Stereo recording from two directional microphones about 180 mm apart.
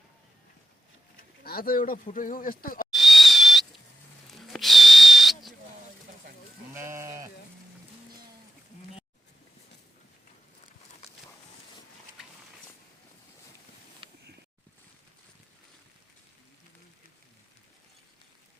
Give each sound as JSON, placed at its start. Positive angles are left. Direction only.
{"t": 1.5, "sound": "speech", "side_deg": 55}
{"t": 2.9, "sound": "a sound", "side_deg": 0}
{"t": 4.3, "sound": "whistle", "side_deg": 0}
{"t": 6.7, "sound": "sheep", "side_deg": -15}